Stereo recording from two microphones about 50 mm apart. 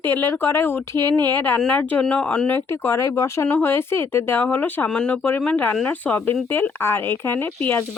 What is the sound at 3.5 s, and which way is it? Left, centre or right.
Speech, left.